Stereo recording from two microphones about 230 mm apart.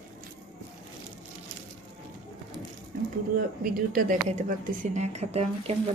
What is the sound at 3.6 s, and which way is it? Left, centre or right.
A woman's voice, right.